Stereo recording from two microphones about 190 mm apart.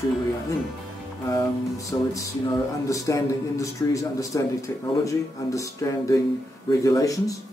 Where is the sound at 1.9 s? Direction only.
15° left (ahead or behind).